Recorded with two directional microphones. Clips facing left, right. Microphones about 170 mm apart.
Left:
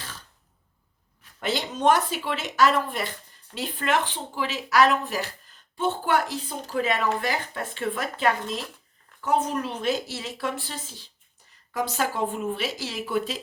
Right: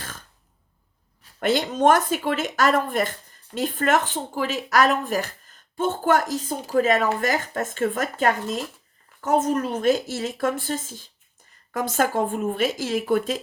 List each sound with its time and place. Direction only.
0.0 s throat clearing: 50° right (ahead or behind)
1.4 s speech: 50° right (ahead or behind)